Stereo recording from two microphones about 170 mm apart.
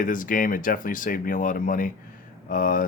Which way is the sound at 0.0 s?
50° left (ahead or behind).